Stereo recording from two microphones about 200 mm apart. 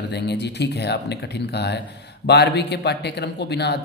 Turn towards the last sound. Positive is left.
turn(degrees=55)  # may be behind; listen again after turning